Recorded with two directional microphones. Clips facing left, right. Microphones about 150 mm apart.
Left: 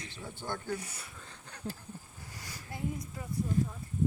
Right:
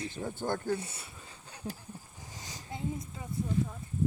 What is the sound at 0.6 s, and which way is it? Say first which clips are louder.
Speech: right 4 dB; 25° right (ahead or behind).